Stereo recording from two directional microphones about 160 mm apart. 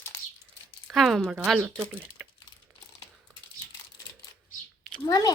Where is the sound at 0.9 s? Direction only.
Centre (ahead or behind).